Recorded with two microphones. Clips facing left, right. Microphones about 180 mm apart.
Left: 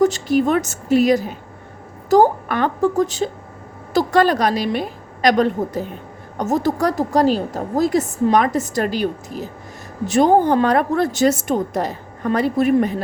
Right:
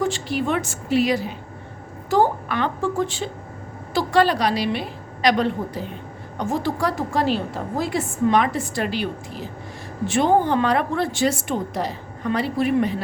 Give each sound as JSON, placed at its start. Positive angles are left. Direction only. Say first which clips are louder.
{"t": 0.0, "sound": "a woman's voice", "louder": "left 7 dB", "side_deg": 40}